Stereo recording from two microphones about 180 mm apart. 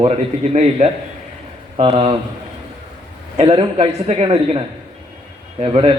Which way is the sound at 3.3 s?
35° right (ahead or behind).